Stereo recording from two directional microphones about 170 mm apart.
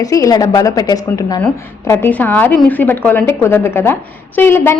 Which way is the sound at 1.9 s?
10° left (ahead or behind).